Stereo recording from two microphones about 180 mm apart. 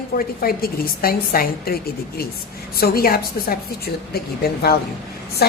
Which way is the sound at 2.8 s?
60° left (ahead or behind).